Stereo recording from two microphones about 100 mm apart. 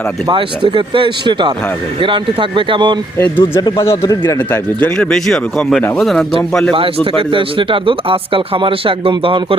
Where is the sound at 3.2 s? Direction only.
25° left (ahead or behind).